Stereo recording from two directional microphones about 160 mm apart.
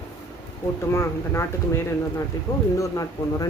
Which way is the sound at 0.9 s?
15° left (ahead or behind).